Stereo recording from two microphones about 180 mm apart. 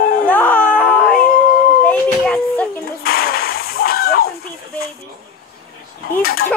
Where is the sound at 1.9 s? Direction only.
10° left (ahead or behind).